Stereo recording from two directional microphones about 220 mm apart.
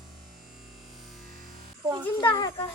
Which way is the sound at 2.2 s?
20° left (ahead or behind).